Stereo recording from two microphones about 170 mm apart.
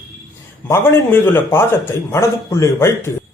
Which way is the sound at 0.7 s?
15° left (ahead or behind).